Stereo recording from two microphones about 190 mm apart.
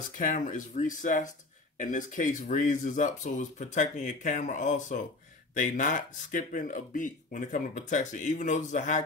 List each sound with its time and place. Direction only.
0.2 s speech: 40° left (ahead or behind)